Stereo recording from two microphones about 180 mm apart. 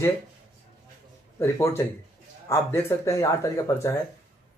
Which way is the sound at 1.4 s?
15° left (ahead or behind).